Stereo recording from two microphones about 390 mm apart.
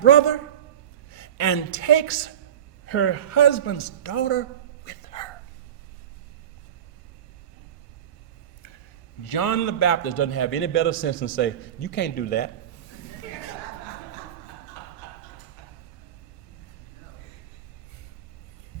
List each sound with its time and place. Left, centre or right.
0.0 s a man's voice: left
1.1 s a woman's voice: left
5.1 s a sound: centre
9.3 s a man's voice: left